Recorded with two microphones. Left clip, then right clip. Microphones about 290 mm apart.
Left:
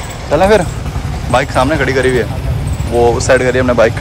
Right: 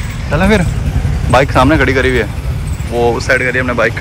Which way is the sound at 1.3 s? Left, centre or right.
Centre.